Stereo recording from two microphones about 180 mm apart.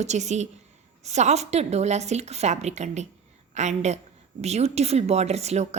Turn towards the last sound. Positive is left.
turn(degrees=-35)  # may be behind; listen again after turning